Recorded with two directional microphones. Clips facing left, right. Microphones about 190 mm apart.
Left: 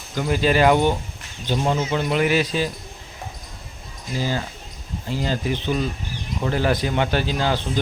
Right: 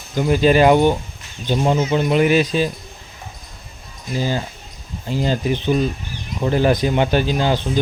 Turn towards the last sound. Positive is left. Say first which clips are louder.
# right 4 dB
turn(degrees=-15)  # may be behind; listen again after turning